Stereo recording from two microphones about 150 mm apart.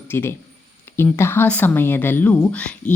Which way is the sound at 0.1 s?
15° left (ahead or behind).